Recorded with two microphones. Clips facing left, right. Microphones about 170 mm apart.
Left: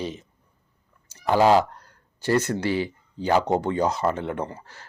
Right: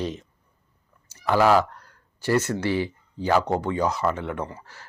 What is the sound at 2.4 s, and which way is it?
Speech, 15° left (ahead or behind).